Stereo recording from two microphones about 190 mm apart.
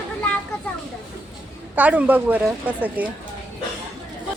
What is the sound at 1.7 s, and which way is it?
A woman's voice, 10° right (ahead or behind).